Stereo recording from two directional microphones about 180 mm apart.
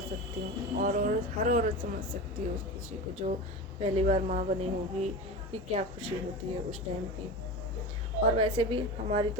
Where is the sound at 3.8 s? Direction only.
35° right (ahead or behind).